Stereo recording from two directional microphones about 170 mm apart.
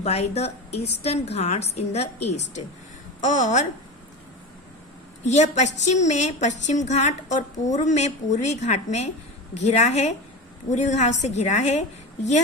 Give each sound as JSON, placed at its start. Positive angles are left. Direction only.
{"t": 0.0, "sound": "a woman's voice", "side_deg": 40}
{"t": 5.2, "sound": "a woman's voice", "side_deg": 40}